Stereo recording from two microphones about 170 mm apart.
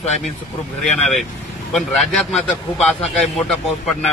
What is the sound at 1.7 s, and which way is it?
A man's voice, 5° left (ahead or behind).